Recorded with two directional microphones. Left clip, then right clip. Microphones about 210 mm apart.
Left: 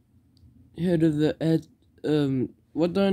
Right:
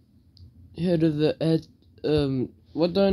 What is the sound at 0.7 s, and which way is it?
Speech, 15° left (ahead or behind).